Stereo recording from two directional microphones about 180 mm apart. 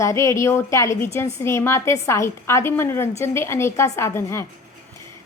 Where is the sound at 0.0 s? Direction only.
15° left (ahead or behind).